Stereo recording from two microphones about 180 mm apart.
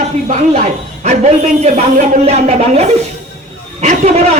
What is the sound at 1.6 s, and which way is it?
A woman's voice, 35° right (ahead or behind).